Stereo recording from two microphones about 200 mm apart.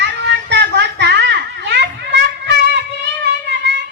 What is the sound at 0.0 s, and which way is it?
Children playing, 60° right (ahead or behind).